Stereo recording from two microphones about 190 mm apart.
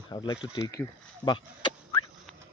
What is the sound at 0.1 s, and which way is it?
Speech, 25° left (ahead or behind).